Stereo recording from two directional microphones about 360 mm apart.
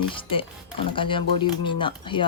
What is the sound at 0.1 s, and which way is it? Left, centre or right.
Speech, centre.